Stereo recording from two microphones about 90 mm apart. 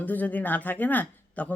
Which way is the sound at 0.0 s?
20° left (ahead or behind).